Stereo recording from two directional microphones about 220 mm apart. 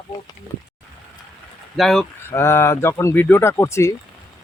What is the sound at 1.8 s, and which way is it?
Speech, centre (ahead or behind).